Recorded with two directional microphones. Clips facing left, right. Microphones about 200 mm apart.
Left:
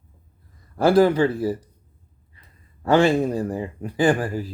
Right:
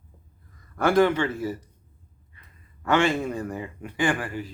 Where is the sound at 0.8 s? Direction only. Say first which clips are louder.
Left 4 dB; 35° left (ahead or behind).